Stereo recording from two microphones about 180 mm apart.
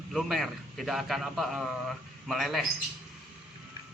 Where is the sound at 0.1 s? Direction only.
Centre (ahead or behind).